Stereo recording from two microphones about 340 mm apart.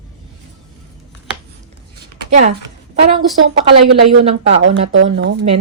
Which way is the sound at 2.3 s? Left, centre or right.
Right.